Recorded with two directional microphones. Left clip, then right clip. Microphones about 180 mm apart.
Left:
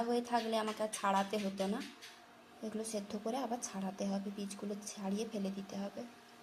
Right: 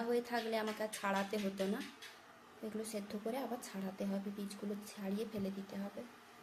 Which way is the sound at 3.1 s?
5° left (ahead or behind).